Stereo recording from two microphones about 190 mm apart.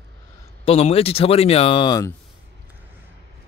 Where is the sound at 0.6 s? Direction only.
30° left (ahead or behind).